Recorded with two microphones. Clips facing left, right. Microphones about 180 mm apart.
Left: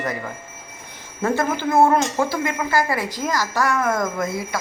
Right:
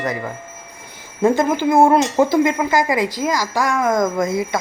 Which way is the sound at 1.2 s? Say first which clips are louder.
Right 6 dB; 15° right (ahead or behind).